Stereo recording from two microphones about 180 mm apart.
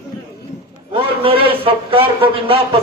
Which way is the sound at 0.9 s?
30° right (ahead or behind).